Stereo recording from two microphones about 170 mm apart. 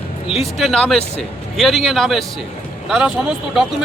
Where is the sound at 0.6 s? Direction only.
Centre (ahead or behind).